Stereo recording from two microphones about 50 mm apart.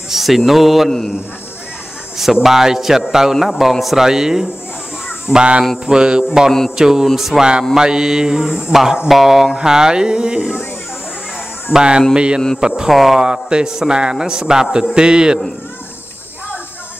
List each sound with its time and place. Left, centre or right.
0.1 s speech: centre
2.4 s a man's voice: centre
11.7 s a man's voice: centre
12.1 s a sound: centre
12.5 s a man's voice: centre
13.2 s a man's voice: centre